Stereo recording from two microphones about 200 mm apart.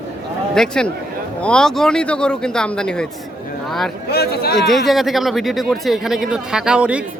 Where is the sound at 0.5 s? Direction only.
5° left (ahead or behind).